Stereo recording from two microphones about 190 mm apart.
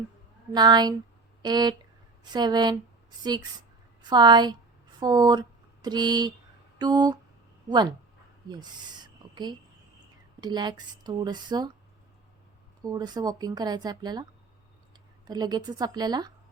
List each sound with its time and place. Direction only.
0.5 s speech: 20° right (ahead or behind)
6.7 s a sound: 20° right (ahead or behind)
7.7 s speech: 20° right (ahead or behind)
8.4 s owl: 20° right (ahead or behind)
10.4 s speech: 20° right (ahead or behind)
12.8 s speech: 20° right (ahead or behind)
15.3 s speech: 20° right (ahead or behind)